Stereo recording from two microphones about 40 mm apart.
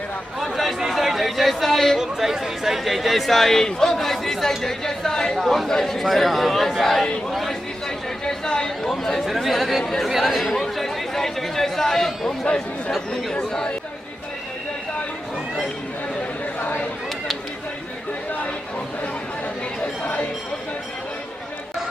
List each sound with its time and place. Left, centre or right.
0.3 s speech: centre
2.0 s speech: centre
7.3 s a sound: centre
8.2 s chatter: centre
8.9 s speech: centre
10.0 s chatter: centre
13.5 s speech: left
16.6 s chatter: left